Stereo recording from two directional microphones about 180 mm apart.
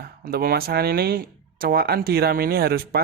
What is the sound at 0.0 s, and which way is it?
Speech, 55° right (ahead or behind).